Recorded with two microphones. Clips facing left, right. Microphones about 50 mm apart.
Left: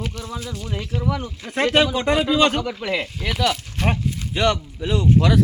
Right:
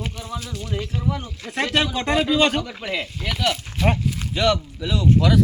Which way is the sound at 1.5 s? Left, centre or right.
Left.